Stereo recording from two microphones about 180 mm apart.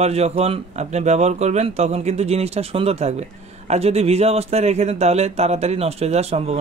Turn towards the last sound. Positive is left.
turn(degrees=-35)  # may be behind; listen again after turning